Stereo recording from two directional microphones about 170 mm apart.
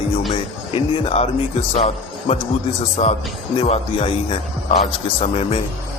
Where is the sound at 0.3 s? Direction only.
35° left (ahead or behind).